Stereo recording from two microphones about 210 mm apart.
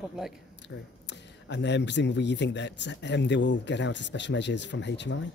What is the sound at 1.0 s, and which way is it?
Speech, 55° left (ahead or behind).